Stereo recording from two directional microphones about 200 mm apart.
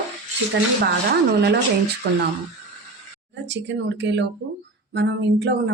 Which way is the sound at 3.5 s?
60° right (ahead or behind).